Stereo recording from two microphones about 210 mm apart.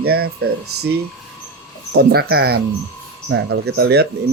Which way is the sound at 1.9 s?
50° right (ahead or behind).